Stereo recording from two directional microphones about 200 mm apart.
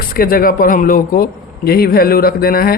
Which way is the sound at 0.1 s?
45° left (ahead or behind).